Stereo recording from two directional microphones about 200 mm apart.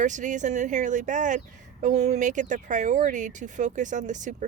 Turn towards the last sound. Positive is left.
turn(degrees=-40)  # may be behind; listen again after turning